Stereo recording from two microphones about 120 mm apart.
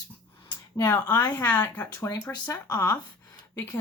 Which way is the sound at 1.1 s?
15° left (ahead or behind).